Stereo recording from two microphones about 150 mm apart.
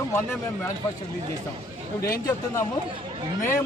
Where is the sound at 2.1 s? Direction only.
25° left (ahead or behind).